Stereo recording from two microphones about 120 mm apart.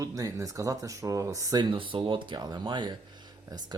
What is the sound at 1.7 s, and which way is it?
Speech, 45° right (ahead or behind).